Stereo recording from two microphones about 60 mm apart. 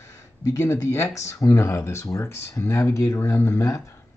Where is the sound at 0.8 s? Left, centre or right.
Left.